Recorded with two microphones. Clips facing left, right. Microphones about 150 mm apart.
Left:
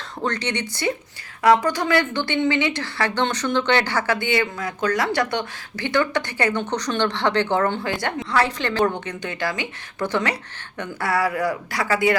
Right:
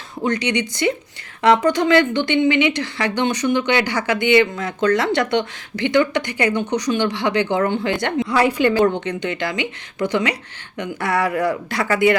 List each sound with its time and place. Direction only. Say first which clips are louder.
0.3 s speech: right 5 dB; 15° right (ahead or behind)
8.3 s speech: right 5 dB; 10° right (ahead or behind)